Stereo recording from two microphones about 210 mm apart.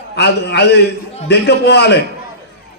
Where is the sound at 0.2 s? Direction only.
50° left (ahead or behind).